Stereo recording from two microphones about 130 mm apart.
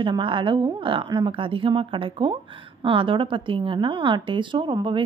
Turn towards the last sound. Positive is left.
turn(degrees=-40)  # may be behind; listen again after turning